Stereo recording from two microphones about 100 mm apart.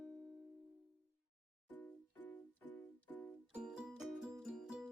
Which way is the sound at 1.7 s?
15° left (ahead or behind).